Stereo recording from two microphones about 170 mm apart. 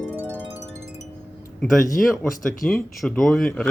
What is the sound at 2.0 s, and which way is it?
Speech, centre (ahead or behind).